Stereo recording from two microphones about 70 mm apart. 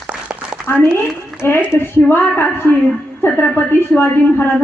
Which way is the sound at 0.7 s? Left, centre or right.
Left.